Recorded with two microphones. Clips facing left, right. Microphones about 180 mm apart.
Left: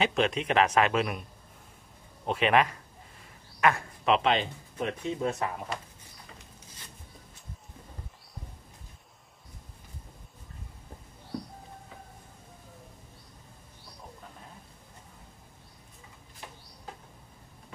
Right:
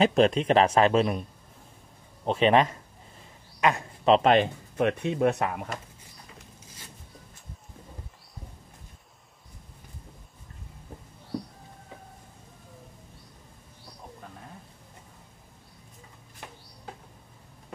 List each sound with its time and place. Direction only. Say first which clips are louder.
0.0 s a man's voice: right 6 dB; 35° right (ahead or behind)
2.2 s a man's voice: right 4 dB; 30° right (ahead or behind)
3.6 s speech: right 1 dB; 15° right (ahead or behind)
4.0 s speech: right 5 dB; 35° right (ahead or behind)
4.3 s speech: right 6 dB; 60° right (ahead or behind)